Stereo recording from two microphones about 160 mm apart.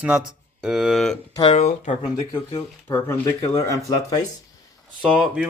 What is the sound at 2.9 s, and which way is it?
Speech, 15° left (ahead or behind).